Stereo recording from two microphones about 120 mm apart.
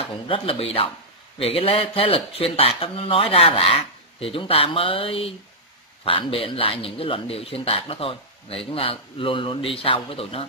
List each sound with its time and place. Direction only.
0.0 s speech: 50° left (ahead or behind)